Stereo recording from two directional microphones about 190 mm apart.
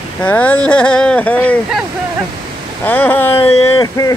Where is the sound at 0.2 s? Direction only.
10° left (ahead or behind).